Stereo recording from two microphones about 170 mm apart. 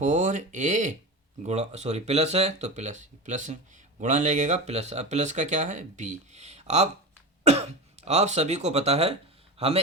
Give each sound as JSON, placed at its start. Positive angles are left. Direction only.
{"t": 0.0, "sound": "speech", "side_deg": -45}
{"t": 8.0, "sound": "speech", "side_deg": -40}